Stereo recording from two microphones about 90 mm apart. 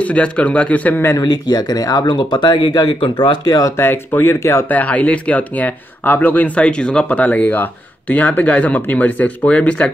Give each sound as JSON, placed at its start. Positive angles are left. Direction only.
{"t": 0.0, "sound": "speech", "side_deg": 15}
{"t": 1.1, "sound": "speech", "side_deg": 45}
{"t": 3.4, "sound": "speech", "side_deg": 45}
{"t": 3.7, "sound": "speech", "side_deg": 25}
{"t": 4.6, "sound": "speech", "side_deg": 15}